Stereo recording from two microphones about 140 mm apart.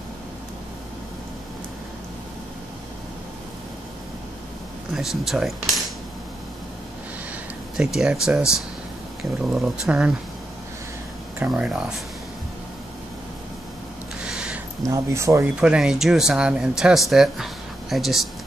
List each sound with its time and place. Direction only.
4.9 s speech: centre (ahead or behind)
7.7 s speech: 5° right (ahead or behind)
11.3 s speech: 10° right (ahead or behind)
14.2 s a sound: 5° right (ahead or behind)
14.9 s speech: 20° right (ahead or behind)
15.6 s speech: 5° right (ahead or behind)